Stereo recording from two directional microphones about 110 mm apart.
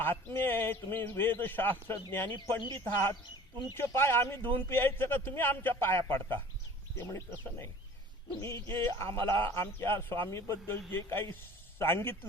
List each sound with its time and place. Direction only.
0.0 s a man's voice: 20° left (ahead or behind)